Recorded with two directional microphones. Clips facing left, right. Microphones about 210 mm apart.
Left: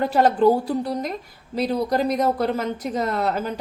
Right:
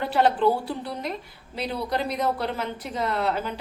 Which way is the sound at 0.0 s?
45° left (ahead or behind).